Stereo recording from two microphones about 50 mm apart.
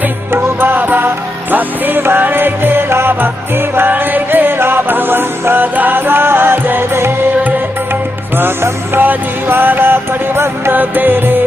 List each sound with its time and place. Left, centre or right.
0.3 s music: right
8.9 s music: right
10.7 s music: right